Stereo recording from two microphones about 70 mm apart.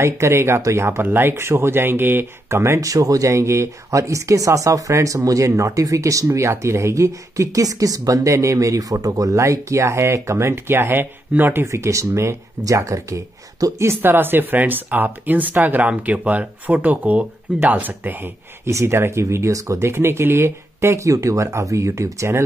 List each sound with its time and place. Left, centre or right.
0.0 s speech: right
0.6 s speech: right
1.0 s speech: right
11.6 s speech: right
13.7 s speech: right
18.7 s speech: right